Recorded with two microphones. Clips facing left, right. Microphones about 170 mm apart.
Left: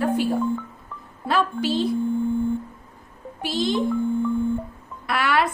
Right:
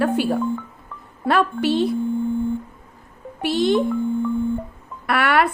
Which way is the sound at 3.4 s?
65° right (ahead or behind).